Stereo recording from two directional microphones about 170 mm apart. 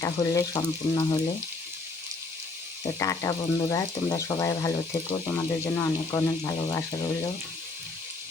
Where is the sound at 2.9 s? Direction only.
20° left (ahead or behind).